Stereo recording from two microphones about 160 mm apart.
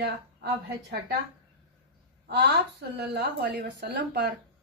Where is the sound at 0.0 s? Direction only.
90° right.